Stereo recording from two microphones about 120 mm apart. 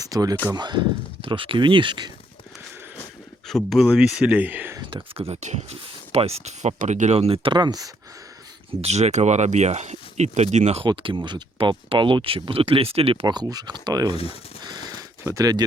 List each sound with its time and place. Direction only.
0.0 s speech: 30° right (ahead or behind)
3.4 s speech: centre (ahead or behind); by 4.8 s 15° right (ahead or behind)
4.8 s speech: 40° right (ahead or behind)
5.1 s speech: 60° right (ahead or behind)
7.5 s speech: 35° right (ahead or behind)
8.8 s speech: 65° right (ahead or behind)
10.8 s speech: 40° right (ahead or behind)
13.2 s speech: 35° right (ahead or behind)
14.6 s a sound: 35° right (ahead or behind)